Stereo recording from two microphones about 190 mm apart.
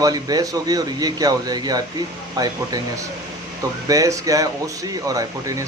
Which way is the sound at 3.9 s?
15° right (ahead or behind).